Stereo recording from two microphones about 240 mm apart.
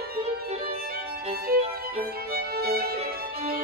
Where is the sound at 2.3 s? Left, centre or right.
Right.